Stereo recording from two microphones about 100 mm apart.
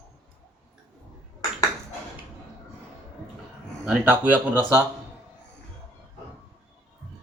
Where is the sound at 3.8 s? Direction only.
10° right (ahead or behind).